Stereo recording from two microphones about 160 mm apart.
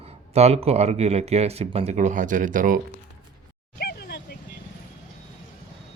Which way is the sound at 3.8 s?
85° left.